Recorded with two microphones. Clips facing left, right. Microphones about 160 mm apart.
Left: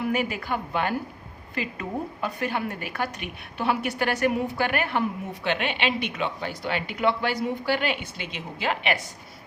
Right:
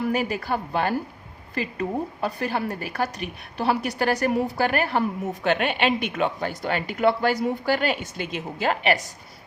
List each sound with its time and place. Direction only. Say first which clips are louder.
0.1 s a woman's voice: right 2 dB; 35° right (ahead or behind)